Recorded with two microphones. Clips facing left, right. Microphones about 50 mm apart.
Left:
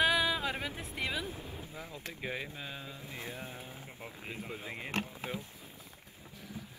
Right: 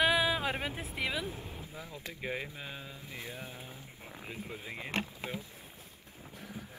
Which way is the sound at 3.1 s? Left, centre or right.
Left.